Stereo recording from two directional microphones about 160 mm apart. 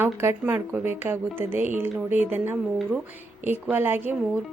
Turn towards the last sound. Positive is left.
turn(degrees=-10)  # may be behind; listen again after turning